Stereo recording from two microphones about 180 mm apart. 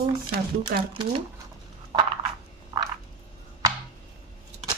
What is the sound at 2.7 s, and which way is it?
Frog, 15° right (ahead or behind).